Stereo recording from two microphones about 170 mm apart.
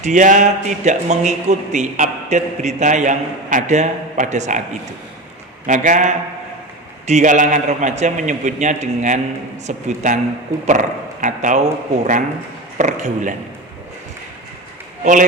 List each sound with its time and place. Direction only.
0.0 s a man's voice: 45° right (ahead or behind)
5.6 s a man's voice: 45° right (ahead or behind)
15.0 s a man's voice: 50° right (ahead or behind)